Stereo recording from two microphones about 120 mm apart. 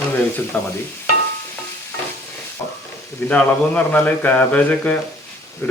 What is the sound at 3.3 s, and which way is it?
Speech, 15° left (ahead or behind).